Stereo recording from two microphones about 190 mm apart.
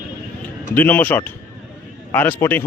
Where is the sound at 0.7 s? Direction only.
10° left (ahead or behind).